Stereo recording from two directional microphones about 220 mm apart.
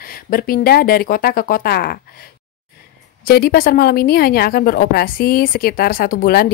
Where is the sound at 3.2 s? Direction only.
45° left (ahead or behind).